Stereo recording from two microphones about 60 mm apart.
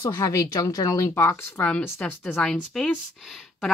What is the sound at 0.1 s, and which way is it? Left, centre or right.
Speech, left.